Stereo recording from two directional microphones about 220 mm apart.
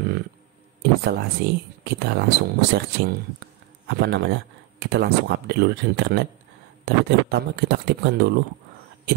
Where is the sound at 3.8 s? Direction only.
50° right (ahead or behind).